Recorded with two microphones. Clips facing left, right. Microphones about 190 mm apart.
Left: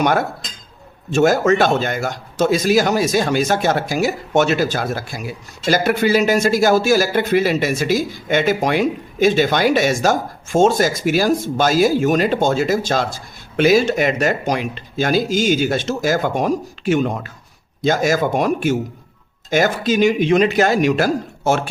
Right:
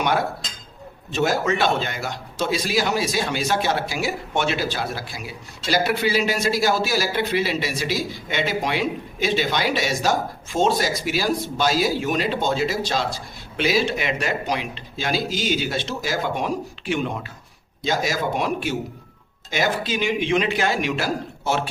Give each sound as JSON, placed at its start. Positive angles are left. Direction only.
{"t": 0.0, "sound": "a man's voice", "side_deg": 45}